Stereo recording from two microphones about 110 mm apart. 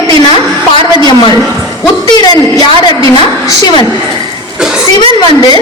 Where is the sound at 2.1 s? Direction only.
40° left (ahead or behind).